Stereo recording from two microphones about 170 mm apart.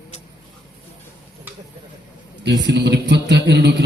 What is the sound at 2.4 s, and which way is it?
A man's voice, 85° right.